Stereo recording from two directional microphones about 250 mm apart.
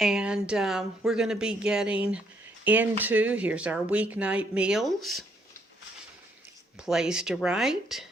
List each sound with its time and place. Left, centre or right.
0.0 s speech: centre
6.7 s speech: centre